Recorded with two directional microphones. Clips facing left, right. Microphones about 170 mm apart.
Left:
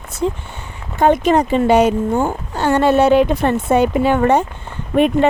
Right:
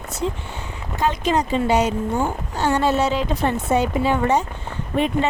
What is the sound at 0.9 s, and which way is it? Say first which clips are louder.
Speech: left 7 dB; 55° left (ahead or behind).